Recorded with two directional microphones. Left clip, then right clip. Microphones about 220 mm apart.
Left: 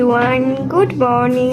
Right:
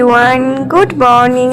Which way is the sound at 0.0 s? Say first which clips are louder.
Right 6 dB; 25° right (ahead or behind).